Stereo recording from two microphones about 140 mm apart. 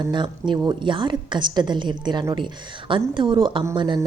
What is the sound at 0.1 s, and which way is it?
Speech, 35° right (ahead or behind).